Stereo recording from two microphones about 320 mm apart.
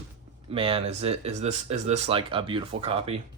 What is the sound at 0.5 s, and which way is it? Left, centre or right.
Speech, centre.